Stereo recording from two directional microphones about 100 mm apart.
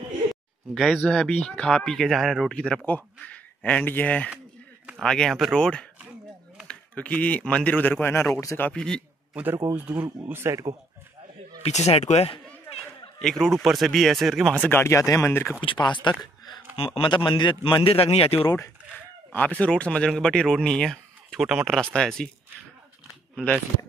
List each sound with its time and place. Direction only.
0.3 s a sound: centre (ahead or behind)
0.9 s speech: 10° left (ahead or behind); by 8.3 s 25° left (ahead or behind)
8.7 s speech: 10° left (ahead or behind)
9.3 s speech: 15° right (ahead or behind)
10.2 s speech: 25° right (ahead or behind)
11.6 s speech: 90° left
13.2 s speech: 5° left (ahead or behind)
14.7 s speech: 25° left (ahead or behind)
15.6 s speech: 50° left (ahead or behind)
16.7 s a man's voice: 70° left (ahead or behind)
19.3 s speech: 15° left (ahead or behind)